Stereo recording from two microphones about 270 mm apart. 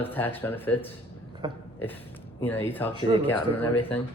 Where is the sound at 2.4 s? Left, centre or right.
Centre.